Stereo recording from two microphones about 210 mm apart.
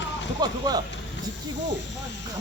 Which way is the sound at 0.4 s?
20° right (ahead or behind).